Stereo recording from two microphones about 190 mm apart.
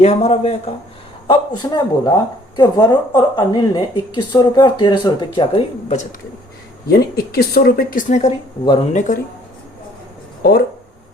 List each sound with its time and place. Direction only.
0.0 s a woman's voice: 35° left (ahead or behind)
6.8 s speech: 55° left (ahead or behind); by 9.1 s 40° left (ahead or behind)